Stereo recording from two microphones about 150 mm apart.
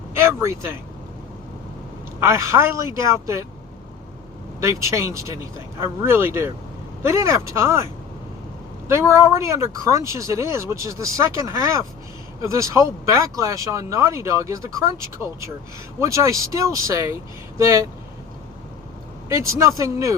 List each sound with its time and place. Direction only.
0.1 s speech: 15° right (ahead or behind)
2.2 s speech: 20° right (ahead or behind)
4.6 s speech: 20° right (ahead or behind)
8.9 s speech: 20° right (ahead or behind)
16.0 s speech: 20° right (ahead or behind)
19.3 s speech: 20° right (ahead or behind)